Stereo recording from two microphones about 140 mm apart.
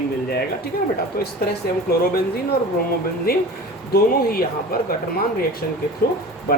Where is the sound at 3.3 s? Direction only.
90° left.